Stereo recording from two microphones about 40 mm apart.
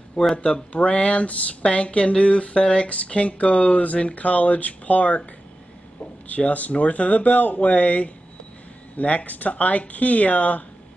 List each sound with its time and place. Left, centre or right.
0.4 s speech: left
6.2 s speech: left